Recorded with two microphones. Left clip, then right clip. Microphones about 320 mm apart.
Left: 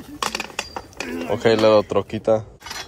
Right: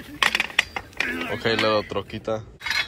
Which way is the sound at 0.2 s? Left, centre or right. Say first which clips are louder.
Right 5 dB; centre.